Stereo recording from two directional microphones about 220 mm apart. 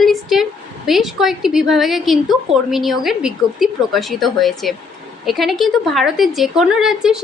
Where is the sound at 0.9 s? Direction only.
Centre (ahead or behind).